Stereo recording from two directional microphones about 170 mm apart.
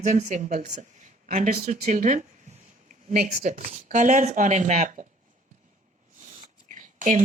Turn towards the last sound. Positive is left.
turn(degrees=-50)  # may be behind; listen again after turning